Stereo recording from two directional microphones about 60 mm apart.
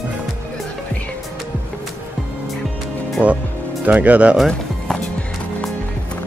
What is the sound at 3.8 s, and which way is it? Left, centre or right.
Speech, right.